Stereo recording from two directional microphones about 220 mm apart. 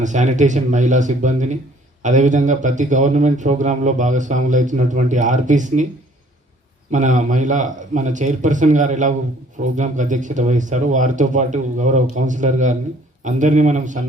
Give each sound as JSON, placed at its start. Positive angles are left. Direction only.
{"t": 0.0, "sound": "a man's voice", "side_deg": -35}
{"t": 6.9, "sound": "a man's voice", "side_deg": -35}